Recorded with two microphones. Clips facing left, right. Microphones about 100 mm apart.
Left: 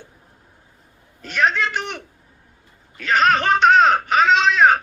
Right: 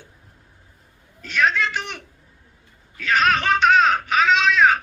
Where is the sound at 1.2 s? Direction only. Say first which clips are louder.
Left 1 dB; 50° left (ahead or behind).